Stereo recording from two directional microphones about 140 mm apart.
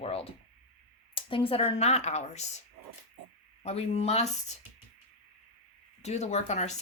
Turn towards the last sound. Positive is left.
turn(degrees=55)  # may be behind; listen again after turning